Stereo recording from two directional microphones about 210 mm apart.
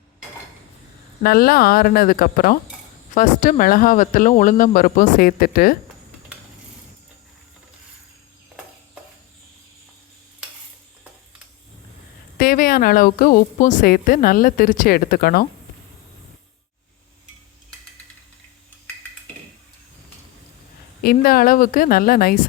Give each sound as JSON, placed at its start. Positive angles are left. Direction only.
{"t": 1.2, "sound": "a woman's voice", "side_deg": 45}
{"t": 12.4, "sound": "a woman's voice", "side_deg": 45}
{"t": 21.0, "sound": "a woman's voice", "side_deg": 45}